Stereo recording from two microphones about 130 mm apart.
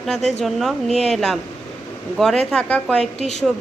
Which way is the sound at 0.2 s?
60° left (ahead or behind).